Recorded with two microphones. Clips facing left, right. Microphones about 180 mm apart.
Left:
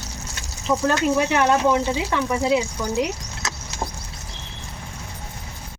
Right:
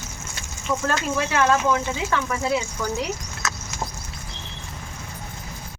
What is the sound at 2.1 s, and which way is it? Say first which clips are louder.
Speech: left 3 dB; 15° left (ahead or behind).